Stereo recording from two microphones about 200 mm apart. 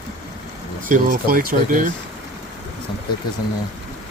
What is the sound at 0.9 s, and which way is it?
Speech, 45° right (ahead or behind).